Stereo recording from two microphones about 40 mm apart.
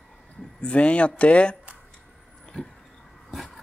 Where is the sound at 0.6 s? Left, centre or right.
Left.